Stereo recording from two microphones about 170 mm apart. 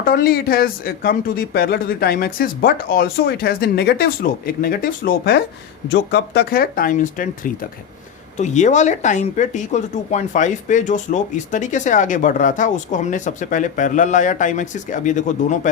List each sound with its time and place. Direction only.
0.0 s speech: 60° left (ahead or behind)
5.9 s speech: 85° left; by 15.7 s 50° left (ahead or behind)